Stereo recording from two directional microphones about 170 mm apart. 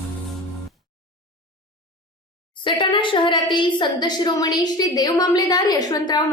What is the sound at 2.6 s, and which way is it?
A woman's voice, 30° left (ahead or behind).